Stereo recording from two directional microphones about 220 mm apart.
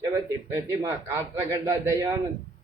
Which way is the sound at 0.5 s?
15° right (ahead or behind).